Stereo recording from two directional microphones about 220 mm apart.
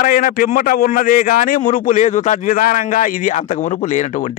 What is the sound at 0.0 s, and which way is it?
Speech, 40° left (ahead or behind).